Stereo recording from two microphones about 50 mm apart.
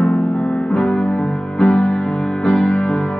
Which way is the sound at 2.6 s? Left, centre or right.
Centre.